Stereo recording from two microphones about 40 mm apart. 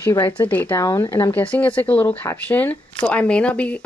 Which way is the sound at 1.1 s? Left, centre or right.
Left.